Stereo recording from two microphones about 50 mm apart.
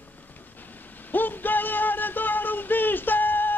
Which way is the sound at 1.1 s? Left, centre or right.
Left.